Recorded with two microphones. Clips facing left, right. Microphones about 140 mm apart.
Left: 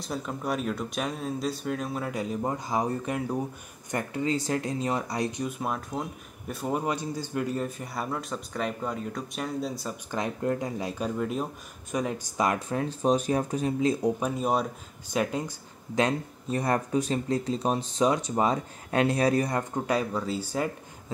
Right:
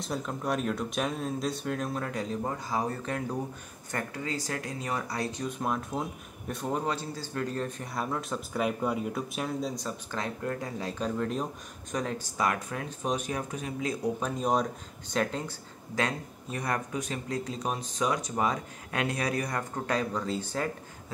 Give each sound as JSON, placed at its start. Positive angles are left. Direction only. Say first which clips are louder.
{"t": 0.0, "sound": "a man's voice", "louder": "even", "side_deg": 0}
{"t": 2.4, "sound": "speech", "louder": "left 5 dB", "side_deg": 20}
{"t": 5.6, "sound": "a man's voice", "louder": "even", "side_deg": 0}
{"t": 10.1, "sound": "speech", "louder": "left 6 dB", "side_deg": 20}
{"t": 14.2, "sound": "speech", "louder": "left 1 dB", "side_deg": 5}
{"t": 16.4, "sound": "speech", "louder": "left 5 dB", "side_deg": 30}
{"t": 19.9, "sound": "speech", "louder": "left 1 dB", "side_deg": 5}